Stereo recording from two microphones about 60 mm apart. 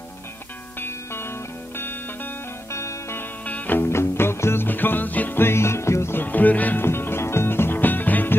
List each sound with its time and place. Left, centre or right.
0.7 s music: left
2.7 s music: left
3.2 s music: left
5.4 s music: left
6.2 s music: left
6.8 s music: left